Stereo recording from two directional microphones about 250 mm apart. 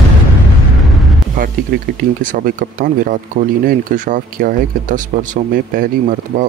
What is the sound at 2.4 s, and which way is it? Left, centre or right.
Speech, right.